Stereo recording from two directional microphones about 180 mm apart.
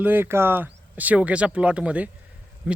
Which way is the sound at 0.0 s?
10° right (ahead or behind).